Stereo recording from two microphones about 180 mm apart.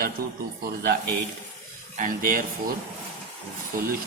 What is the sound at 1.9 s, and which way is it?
Speech, 50° right (ahead or behind).